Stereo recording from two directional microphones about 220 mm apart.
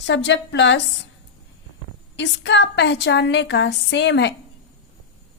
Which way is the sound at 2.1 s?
55° left (ahead or behind).